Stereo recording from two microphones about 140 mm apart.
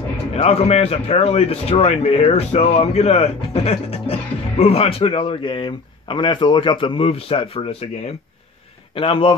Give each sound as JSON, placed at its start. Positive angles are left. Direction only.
{"t": 0.4, "sound": "speech", "side_deg": 50}
{"t": 8.9, "sound": "a man's voice", "side_deg": 40}